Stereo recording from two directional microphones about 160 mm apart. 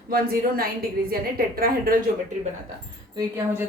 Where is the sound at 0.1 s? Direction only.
70° right (ahead or behind).